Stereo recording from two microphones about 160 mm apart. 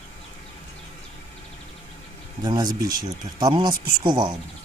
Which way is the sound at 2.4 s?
25° right (ahead or behind).